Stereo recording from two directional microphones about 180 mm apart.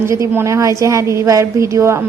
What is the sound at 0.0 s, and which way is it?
A woman's voice, 15° right (ahead or behind).